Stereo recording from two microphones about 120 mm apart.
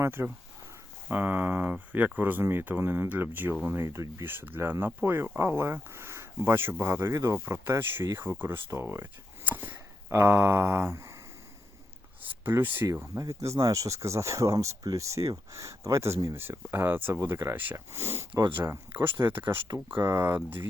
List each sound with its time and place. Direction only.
0.0 s speech: 20° right (ahead or behind)
12.5 s speech: 20° right (ahead or behind)